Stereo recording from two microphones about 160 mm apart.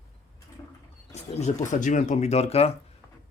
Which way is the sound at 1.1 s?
45° left (ahead or behind).